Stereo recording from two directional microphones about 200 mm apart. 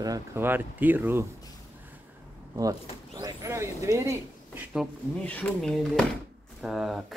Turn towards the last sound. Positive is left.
turn(degrees=0)  # may be behind; listen again after turning